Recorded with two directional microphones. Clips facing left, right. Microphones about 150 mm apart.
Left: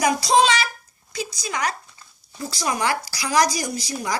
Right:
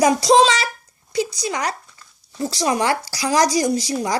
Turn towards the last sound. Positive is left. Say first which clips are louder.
# right 7 dB
turn(degrees=-30)  # may be behind; listen again after turning